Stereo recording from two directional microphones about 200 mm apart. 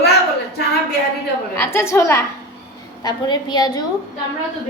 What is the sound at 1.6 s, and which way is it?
A woman's voice, 15° left (ahead or behind).